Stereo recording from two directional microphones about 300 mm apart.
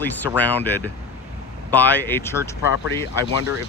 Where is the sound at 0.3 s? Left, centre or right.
Centre.